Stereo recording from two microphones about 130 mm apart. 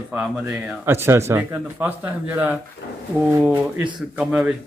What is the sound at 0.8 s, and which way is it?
Speech, 20° right (ahead or behind).